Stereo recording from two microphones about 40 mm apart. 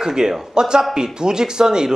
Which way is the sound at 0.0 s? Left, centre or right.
Centre.